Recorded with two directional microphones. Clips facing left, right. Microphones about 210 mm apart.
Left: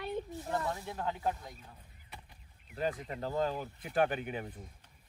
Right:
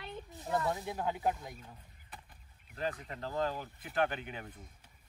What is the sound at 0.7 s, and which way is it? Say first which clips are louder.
Speech: right 2 dB; 15° right (ahead or behind).